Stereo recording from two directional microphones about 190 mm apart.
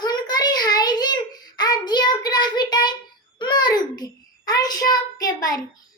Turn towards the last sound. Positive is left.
turn(degrees=20)  # may be behind; listen again after turning